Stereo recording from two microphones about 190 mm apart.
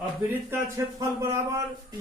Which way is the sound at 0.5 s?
15° right (ahead or behind).